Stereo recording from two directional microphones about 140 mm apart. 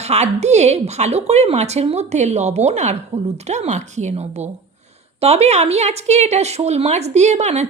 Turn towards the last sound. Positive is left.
turn(degrees=-55)  # may be behind; listen again after turning